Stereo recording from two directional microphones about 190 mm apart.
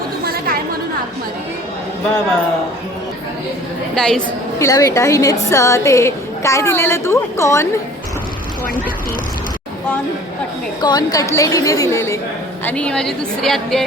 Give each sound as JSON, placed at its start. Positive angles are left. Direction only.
{"t": 0.3, "sound": "chatter", "side_deg": -50}
{"t": 3.9, "sound": "a woman's voice", "side_deg": 5}
{"t": 4.6, "sound": "a woman's voice", "side_deg": 20}
{"t": 10.8, "sound": "a woman's voice", "side_deg": 20}